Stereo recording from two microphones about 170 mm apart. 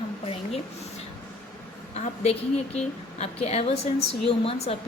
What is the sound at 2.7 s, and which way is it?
A woman's voice, 40° left (ahead or behind).